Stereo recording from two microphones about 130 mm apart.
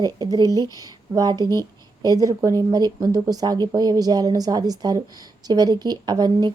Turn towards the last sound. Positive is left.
turn(degrees=-30)  # may be behind; listen again after turning